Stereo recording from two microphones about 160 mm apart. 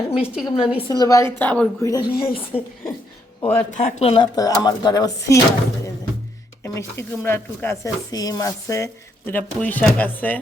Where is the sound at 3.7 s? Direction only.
50° left (ahead or behind).